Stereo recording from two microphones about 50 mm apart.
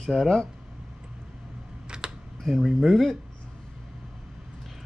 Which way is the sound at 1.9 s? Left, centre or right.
Centre.